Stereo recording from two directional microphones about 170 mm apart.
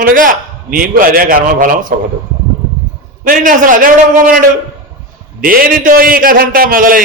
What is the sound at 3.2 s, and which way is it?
A man's voice, 50° right (ahead or behind).